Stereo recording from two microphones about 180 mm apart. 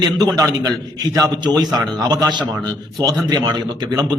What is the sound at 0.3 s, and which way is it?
A man's voice, 20° right (ahead or behind).